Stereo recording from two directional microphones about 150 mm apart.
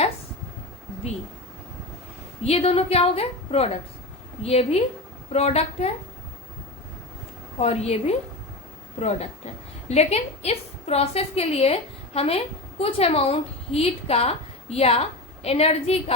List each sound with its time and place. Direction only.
2.4 s a woman's voice: 45° left (ahead or behind)
7.6 s a woman's voice: 45° left (ahead or behind)